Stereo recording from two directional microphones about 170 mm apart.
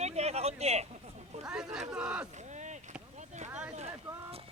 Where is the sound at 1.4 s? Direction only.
5° right (ahead or behind).